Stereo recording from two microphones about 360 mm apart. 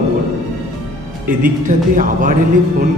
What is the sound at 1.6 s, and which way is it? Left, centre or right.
Speech, right.